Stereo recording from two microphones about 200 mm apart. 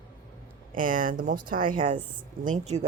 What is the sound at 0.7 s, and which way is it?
Speech, 45° right (ahead or behind).